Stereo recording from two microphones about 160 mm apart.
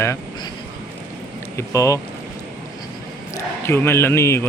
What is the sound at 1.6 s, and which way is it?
Speech, 20° left (ahead or behind).